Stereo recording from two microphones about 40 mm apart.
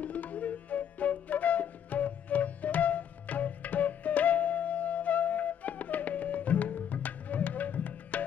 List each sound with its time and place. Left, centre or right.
0.0 s flute: left